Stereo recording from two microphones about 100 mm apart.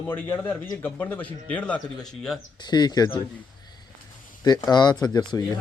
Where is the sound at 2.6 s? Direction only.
45° left (ahead or behind).